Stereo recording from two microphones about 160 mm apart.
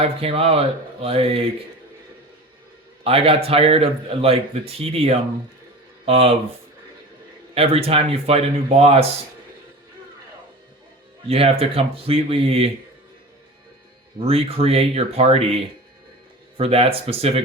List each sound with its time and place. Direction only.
0.0 s speech: 35° right (ahead or behind)
3.0 s speech: 35° right (ahead or behind)
7.5 s speech: 35° right (ahead or behind)
11.3 s speech: 35° right (ahead or behind)
14.3 s speech: 40° right (ahead or behind)